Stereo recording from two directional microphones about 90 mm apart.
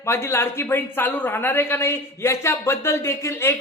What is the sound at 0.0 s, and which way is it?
Speech, 30° left (ahead or behind).